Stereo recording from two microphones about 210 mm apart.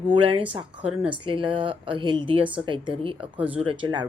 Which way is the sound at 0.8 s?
5° right (ahead or behind).